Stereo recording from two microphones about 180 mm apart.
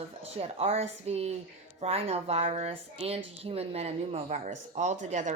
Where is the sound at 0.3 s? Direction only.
35° right (ahead or behind).